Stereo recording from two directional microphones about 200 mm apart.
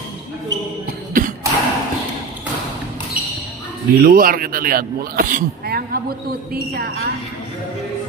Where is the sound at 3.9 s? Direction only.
45° right (ahead or behind).